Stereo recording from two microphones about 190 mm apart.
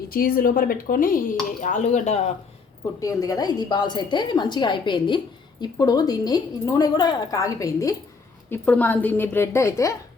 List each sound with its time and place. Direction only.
0.1 s speech: 50° left (ahead or behind)
3.0 s a woman's voice: 20° left (ahead or behind)